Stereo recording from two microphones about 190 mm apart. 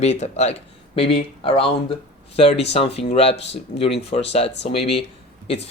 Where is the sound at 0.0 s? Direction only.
35° left (ahead or behind).